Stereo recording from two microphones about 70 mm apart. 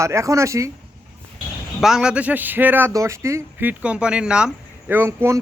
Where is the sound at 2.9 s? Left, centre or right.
Right.